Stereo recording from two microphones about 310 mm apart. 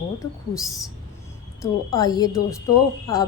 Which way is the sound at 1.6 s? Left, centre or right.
Centre.